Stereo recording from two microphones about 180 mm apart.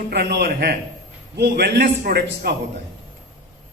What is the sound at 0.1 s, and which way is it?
A man's voice, 65° right (ahead or behind).